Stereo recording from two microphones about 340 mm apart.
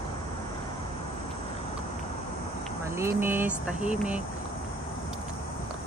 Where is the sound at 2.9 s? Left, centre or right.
Centre.